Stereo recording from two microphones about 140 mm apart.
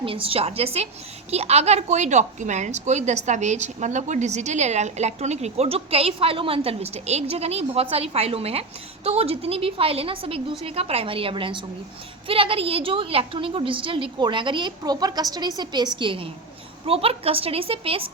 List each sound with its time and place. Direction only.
0.0 s a woman's voice: 40° right (ahead or behind)